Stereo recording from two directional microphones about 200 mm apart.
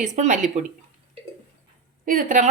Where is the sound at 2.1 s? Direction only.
40° right (ahead or behind).